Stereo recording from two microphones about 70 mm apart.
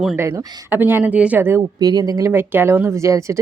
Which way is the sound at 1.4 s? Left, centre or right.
Right.